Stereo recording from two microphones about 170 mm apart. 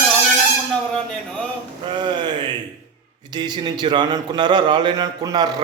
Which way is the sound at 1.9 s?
25° right (ahead or behind).